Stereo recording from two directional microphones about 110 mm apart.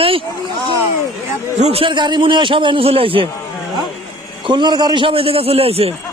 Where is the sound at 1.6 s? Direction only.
65° right (ahead or behind).